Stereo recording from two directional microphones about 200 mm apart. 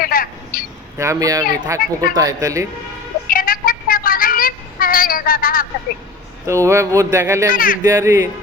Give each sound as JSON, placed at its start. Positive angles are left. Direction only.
{"t": 0.0, "sound": "a sound", "side_deg": 45}
{"t": 0.9, "sound": "speech", "side_deg": -15}
{"t": 3.2, "sound": "a sound", "side_deg": 45}
{"t": 6.4, "sound": "speech", "side_deg": -15}
{"t": 7.5, "sound": "speech", "side_deg": 45}
{"t": 7.9, "sound": "speech", "side_deg": -15}